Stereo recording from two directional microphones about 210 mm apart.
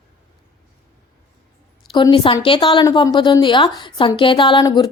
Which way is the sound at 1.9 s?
20° left (ahead or behind).